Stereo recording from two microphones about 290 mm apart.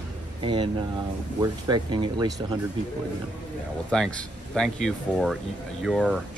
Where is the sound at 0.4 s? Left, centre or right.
Centre.